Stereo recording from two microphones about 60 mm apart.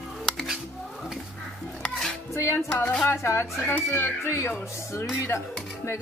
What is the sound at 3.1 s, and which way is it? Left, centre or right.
Speech, left.